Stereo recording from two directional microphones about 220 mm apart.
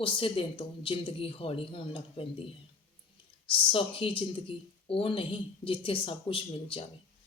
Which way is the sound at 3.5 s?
25° left (ahead or behind).